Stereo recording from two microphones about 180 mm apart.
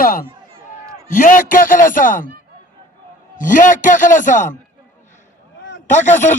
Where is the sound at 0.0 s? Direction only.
50° left (ahead or behind).